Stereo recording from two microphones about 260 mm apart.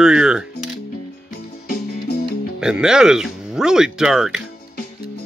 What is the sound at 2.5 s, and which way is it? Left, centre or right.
Speech, centre.